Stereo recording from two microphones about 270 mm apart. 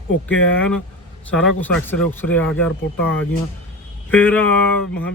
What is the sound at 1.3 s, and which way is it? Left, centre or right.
Speech, centre.